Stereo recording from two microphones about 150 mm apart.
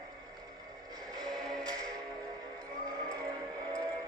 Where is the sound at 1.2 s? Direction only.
5° left (ahead or behind).